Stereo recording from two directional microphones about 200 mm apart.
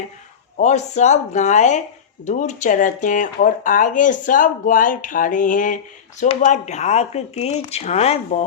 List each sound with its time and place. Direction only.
0.5 s speech: 35° left (ahead or behind)